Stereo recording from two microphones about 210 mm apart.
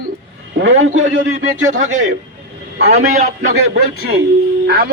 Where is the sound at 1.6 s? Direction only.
35° right (ahead or behind).